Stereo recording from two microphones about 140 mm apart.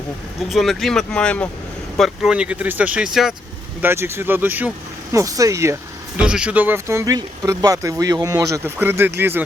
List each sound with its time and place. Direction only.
0.3 s speech: centre (ahead or behind)
2.0 s speech: 5° right (ahead or behind)
3.8 s speech: 15° right (ahead or behind)
6.1 s speech: 5° right (ahead or behind)